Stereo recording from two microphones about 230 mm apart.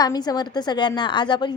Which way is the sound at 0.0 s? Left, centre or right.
Centre.